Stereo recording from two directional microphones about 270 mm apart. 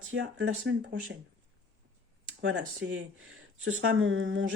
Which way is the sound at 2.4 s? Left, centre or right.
Right.